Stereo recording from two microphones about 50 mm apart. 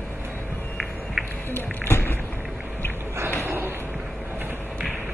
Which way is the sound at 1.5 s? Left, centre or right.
Left.